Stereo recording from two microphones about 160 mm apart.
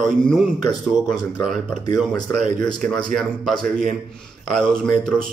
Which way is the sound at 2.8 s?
Centre (ahead or behind).